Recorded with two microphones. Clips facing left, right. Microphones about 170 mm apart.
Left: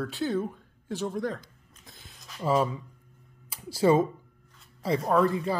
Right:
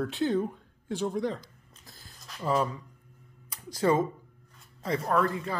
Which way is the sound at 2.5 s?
15° left (ahead or behind).